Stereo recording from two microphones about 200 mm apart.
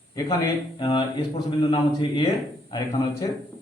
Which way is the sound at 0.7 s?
25° left (ahead or behind).